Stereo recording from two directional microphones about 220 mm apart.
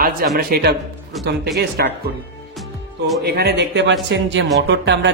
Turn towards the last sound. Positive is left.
turn(degrees=-55)  # may be behind; listen again after turning